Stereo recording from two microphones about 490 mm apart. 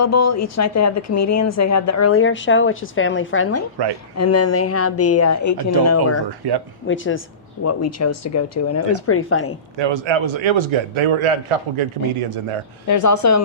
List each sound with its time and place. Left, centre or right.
0.0 s a woman's voice: left
6.4 s speech: right
6.8 s a woman's voice: left
9.7 s a man's voice: right
12.9 s speech: left